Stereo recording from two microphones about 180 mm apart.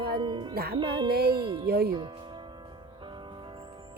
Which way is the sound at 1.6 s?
60° right (ahead or behind).